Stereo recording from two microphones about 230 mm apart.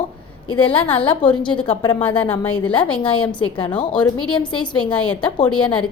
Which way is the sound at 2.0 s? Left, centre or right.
Centre.